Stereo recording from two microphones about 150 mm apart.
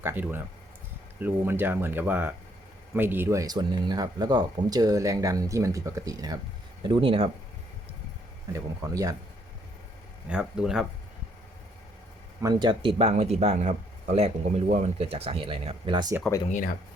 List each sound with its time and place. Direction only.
0.0 s speech: 15° right (ahead or behind)
6.8 s speech: 35° right (ahead or behind)
8.5 s speech: 20° right (ahead or behind)
10.2 s speech: 5° right (ahead or behind)
12.4 s speech: 25° right (ahead or behind)
13.0 s speech: 45° right (ahead or behind)
16.5 s speech: 60° left (ahead or behind)